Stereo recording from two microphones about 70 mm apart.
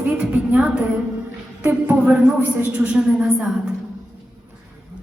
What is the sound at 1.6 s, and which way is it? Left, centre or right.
Speech, right.